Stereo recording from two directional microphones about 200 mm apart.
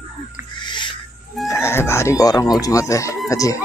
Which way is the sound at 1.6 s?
10° left (ahead or behind).